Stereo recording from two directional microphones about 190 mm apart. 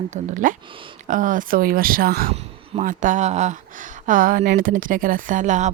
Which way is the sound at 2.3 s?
30° right (ahead or behind).